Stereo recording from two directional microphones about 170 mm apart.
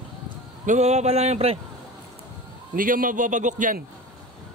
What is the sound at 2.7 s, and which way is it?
A man's voice, 55° right (ahead or behind).